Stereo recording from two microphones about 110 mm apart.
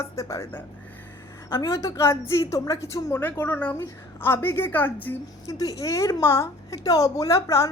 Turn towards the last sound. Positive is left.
turn(degrees=25)  # may be behind; listen again after turning